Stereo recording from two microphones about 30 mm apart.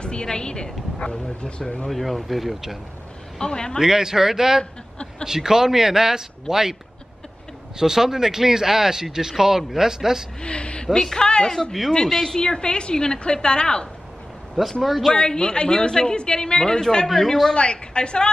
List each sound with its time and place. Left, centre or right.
0.0 s a woman's voice: left
1.9 s speech: centre
3.3 s a woman's voice: left
3.8 s a man's voice: centre
7.8 s a man's voice: centre
10.4 s a woman's voice: left
10.9 s a woman's voice: left
12.1 s a woman's voice: centre
12.4 s a woman's voice: left
14.5 s speech: centre
15.1 s a woman's voice: left
17.6 s a woman's voice: left